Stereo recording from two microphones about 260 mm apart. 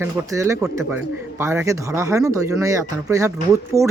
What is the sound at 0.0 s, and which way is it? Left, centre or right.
Speech, centre.